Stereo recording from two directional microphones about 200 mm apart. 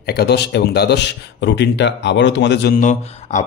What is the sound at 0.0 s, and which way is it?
Speech, 55° left (ahead or behind).